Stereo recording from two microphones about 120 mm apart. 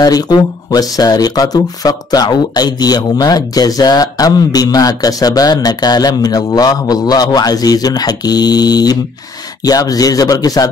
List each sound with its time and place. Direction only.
0.0 s speech: 35° left (ahead or behind)